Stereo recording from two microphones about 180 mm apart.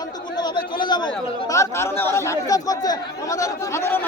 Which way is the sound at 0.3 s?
25° left (ahead or behind).